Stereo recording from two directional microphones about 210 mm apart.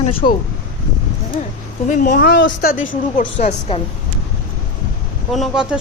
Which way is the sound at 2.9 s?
35° left (ahead or behind).